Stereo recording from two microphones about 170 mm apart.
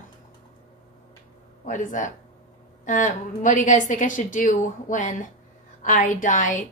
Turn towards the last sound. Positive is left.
turn(degrees=50)  # may be behind; listen again after turning